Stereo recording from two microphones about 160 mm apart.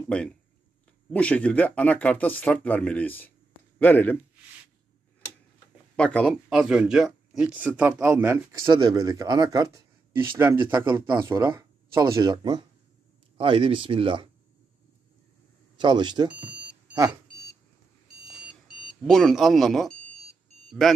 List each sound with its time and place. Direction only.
1.1 s speech: 10° left (ahead or behind)
5.9 s speech: 5° left (ahead or behind)
6.5 s speech: 5° right (ahead or behind); by 14.3 s 35° right (ahead or behind)
15.8 s speech: 30° right (ahead or behind)
18.5 s speech: centre (ahead or behind)